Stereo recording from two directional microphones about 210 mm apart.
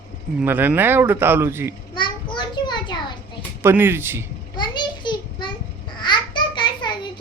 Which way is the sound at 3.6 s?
10° right (ahead or behind).